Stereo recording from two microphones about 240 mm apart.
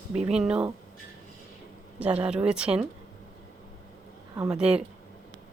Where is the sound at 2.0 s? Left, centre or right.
Centre.